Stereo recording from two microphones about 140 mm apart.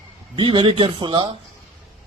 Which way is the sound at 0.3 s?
35° right (ahead or behind).